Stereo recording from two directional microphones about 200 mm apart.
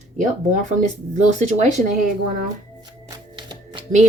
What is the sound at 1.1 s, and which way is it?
Speech, 35° right (ahead or behind).